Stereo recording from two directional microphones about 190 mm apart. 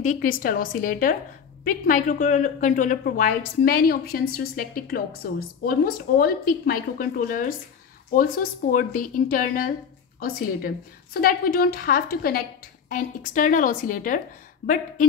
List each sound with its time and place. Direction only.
0.0 s a woman's voice: 45° left (ahead or behind)